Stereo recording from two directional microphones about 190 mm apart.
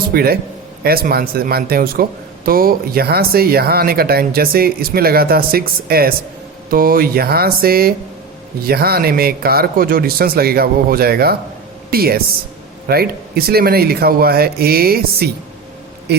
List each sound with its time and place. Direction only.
0.1 s speech: 55° right (ahead or behind)